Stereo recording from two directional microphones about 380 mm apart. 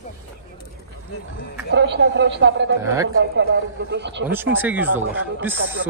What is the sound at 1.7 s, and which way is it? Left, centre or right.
Speech, right.